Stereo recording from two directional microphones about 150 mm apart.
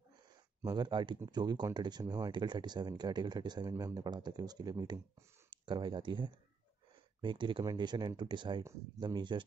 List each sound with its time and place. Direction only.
0.6 s speech: 30° right (ahead or behind)